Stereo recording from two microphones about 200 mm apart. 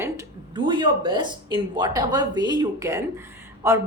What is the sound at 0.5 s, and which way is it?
Speech, 25° right (ahead or behind).